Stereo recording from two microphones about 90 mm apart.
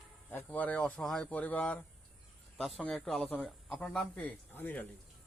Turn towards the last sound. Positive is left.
turn(degrees=20)  # may be behind; listen again after turning